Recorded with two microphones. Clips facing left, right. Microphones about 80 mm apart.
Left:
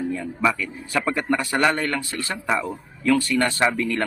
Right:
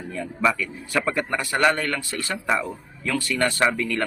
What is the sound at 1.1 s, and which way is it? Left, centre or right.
A man's voice, left.